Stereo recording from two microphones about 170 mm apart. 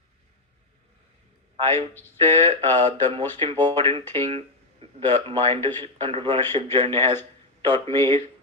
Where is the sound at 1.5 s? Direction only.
30° right (ahead or behind).